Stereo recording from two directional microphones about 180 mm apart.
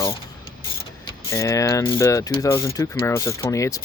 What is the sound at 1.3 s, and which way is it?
Speech, 15° left (ahead or behind).